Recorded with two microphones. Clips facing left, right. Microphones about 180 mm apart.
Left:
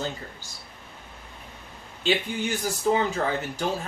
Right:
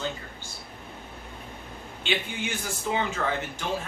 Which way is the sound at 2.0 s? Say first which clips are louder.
Left 5 dB; 40° left (ahead or behind).